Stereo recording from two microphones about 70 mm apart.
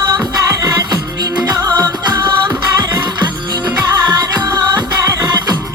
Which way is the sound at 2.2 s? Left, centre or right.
Right.